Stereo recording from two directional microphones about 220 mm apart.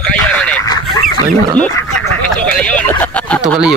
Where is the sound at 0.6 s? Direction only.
20° left (ahead or behind).